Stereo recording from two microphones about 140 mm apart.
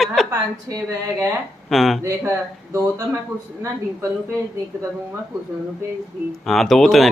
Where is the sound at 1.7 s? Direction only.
Centre (ahead or behind).